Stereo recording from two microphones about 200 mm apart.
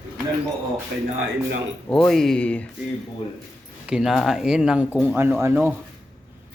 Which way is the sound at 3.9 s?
Centre (ahead or behind).